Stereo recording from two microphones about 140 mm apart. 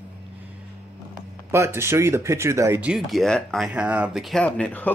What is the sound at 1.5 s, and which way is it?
Speech, 20° right (ahead or behind).